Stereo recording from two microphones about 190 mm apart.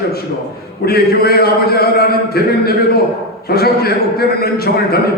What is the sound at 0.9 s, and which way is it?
A man's voice, 55° left (ahead or behind).